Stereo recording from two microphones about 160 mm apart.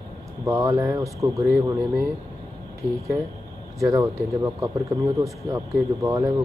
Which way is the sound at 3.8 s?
20° right (ahead or behind).